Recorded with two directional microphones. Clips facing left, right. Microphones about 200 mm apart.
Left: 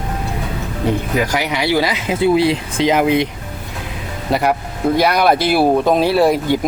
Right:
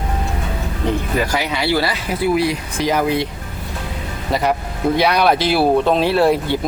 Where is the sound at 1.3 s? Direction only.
15° left (ahead or behind).